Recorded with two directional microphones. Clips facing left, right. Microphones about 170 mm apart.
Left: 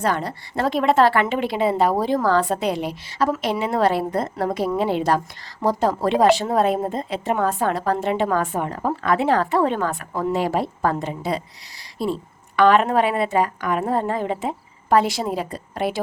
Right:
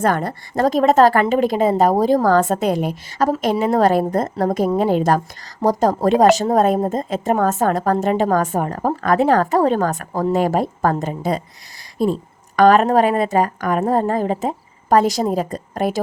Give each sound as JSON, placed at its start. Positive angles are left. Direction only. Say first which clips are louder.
{"t": 0.0, "sound": "a woman's voice", "louder": "right 4 dB", "side_deg": -50}